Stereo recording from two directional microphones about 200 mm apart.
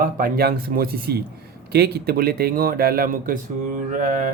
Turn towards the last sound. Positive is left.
turn(degrees=-40)  # may be behind; listen again after turning